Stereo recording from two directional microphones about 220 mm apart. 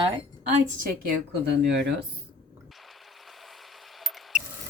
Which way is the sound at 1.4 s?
50° right (ahead or behind).